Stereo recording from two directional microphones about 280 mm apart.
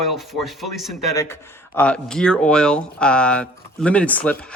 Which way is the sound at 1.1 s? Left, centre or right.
Centre.